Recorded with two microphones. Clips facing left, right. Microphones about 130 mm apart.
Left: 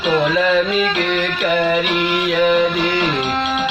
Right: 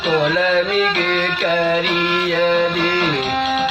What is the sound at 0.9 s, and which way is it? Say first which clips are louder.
Music: even; 5° left (ahead or behind).